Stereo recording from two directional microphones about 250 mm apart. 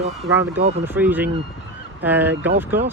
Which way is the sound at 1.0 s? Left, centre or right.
Centre.